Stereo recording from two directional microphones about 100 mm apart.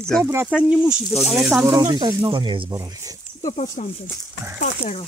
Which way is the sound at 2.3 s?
55° right (ahead or behind).